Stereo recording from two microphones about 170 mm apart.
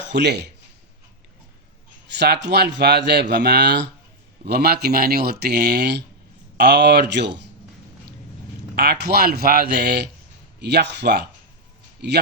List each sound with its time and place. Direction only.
0.1 s speech: 80° right
2.1 s speech: 80° right
4.4 s speech: 70° right (ahead or behind); by 7.4 s 90° right
8.7 s speech: 75° right (ahead or behind)